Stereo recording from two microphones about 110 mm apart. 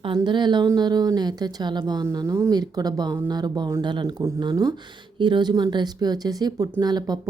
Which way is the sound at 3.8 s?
45° right (ahead or behind).